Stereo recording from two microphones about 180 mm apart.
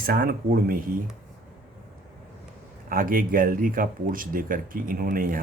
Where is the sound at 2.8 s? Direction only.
50° right (ahead or behind).